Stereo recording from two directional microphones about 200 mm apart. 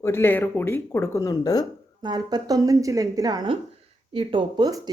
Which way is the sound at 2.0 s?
20° right (ahead or behind).